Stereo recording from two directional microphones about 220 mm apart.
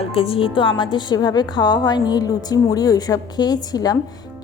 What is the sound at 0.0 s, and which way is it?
A woman's voice, 25° left (ahead or behind).